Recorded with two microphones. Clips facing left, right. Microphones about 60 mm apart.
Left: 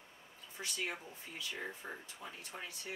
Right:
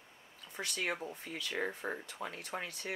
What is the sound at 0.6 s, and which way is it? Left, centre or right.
Speech, right.